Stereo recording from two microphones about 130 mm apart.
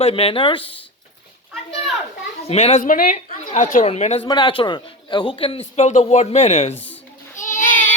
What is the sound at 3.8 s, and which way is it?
Speech, 55° left (ahead or behind).